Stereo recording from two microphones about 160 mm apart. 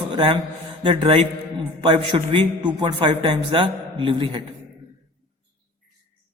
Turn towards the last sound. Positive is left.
turn(degrees=-30)  # may be behind; listen again after turning